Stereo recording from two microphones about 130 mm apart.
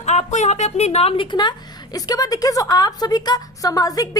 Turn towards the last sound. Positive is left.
turn(degrees=30)  # may be behind; listen again after turning